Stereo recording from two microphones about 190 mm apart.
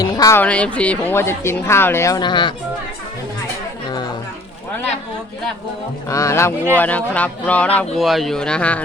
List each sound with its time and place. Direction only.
0.0 s a sound: 20° left (ahead or behind)
0.4 s a woman's voice: 5° left (ahead or behind); by 2.5 s 25° left (ahead or behind)
6.1 s a woman's voice: 15° left (ahead or behind)